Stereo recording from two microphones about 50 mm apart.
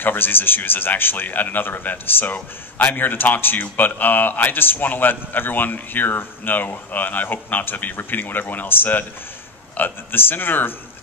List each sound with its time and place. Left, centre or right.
0.0 s a man's voice: left